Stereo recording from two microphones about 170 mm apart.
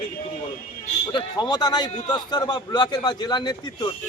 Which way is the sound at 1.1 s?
25° left (ahead or behind).